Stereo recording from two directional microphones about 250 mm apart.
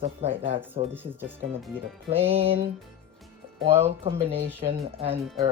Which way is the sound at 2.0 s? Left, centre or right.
Right.